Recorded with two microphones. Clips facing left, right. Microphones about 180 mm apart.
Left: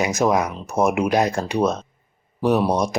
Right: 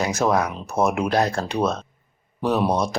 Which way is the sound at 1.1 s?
15° left (ahead or behind).